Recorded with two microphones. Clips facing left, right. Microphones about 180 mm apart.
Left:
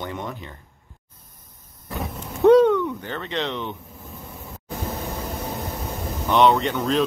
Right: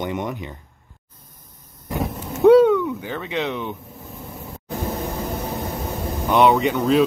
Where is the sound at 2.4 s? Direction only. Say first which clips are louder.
Right 2 dB; 5° right (ahead or behind).